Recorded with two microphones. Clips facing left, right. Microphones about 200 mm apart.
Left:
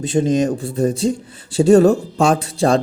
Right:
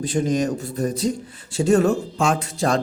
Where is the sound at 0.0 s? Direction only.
25° left (ahead or behind).